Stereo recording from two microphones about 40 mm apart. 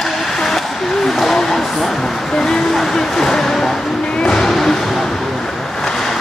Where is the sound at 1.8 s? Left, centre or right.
Centre.